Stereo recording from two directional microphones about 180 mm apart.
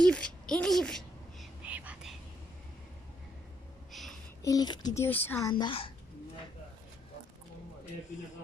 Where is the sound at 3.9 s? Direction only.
Centre (ahead or behind).